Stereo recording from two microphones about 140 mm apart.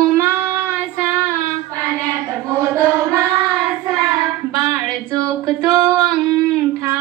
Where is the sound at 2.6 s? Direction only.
25° right (ahead or behind).